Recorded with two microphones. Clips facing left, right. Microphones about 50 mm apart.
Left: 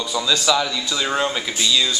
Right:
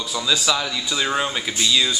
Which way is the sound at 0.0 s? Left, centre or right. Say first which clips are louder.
Left 2 dB; centre.